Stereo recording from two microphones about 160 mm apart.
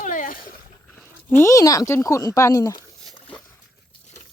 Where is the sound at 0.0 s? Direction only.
55° left (ahead or behind).